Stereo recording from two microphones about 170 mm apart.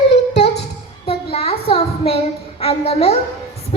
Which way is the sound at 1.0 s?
35° left (ahead or behind).